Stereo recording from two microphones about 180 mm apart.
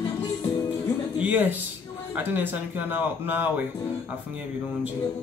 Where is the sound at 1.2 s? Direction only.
10° right (ahead or behind).